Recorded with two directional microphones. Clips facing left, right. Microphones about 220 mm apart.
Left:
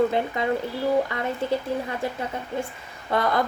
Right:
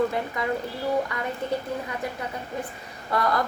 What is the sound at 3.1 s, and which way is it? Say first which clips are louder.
Speech: left 2 dB; 25° left (ahead or behind).